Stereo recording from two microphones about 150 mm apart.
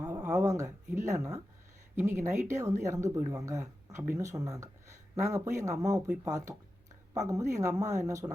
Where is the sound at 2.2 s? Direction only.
55° right (ahead or behind).